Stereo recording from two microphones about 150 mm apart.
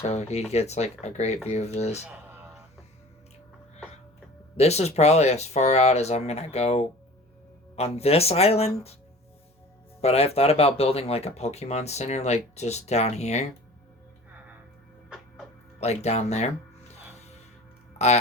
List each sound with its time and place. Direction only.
0.0 s speech: 45° left (ahead or behind)
4.5 s speech: 45° left (ahead or behind)
10.0 s speech: 45° left (ahead or behind)
15.8 s speech: 45° left (ahead or behind)
17.9 s a sound: 45° left (ahead or behind)